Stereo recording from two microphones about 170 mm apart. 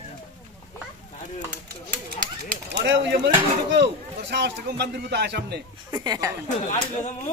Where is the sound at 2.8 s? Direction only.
90° right.